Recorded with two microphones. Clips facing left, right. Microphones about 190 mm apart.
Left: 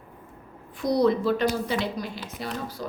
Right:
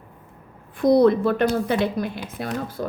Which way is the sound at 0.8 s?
55° right (ahead or behind).